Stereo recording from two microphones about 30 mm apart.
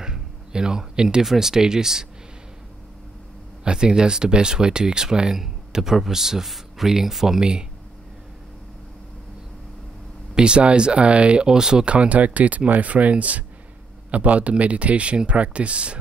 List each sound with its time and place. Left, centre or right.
0.0 s a sound: right
1.2 s speech: centre
1.5 s speech: right
3.7 s speech: right
5.3 s speech: centre
7.3 s speech: right
10.3 s speech: right
11.4 s speech: right
11.8 s speech: right